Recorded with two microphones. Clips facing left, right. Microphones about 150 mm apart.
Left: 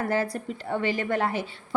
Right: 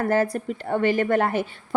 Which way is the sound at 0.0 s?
50° right (ahead or behind).